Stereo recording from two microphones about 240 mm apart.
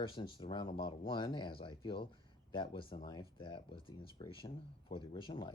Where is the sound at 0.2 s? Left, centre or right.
Left.